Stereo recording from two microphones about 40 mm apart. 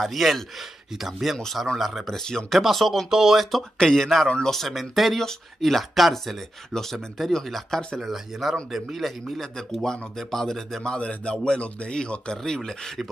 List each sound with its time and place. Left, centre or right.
0.0 s speech: centre
2.6 s speech: centre
3.7 s speech: centre
10.8 s speech: left